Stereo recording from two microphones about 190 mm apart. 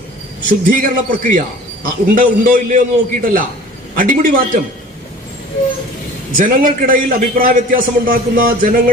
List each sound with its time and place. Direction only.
0.6 s a man's voice: 45° right (ahead or behind)
6.3 s a man's voice: 45° right (ahead or behind)